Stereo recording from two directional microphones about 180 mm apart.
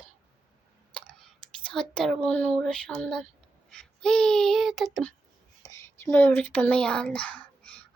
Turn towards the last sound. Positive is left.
turn(degrees=10)  # may be behind; listen again after turning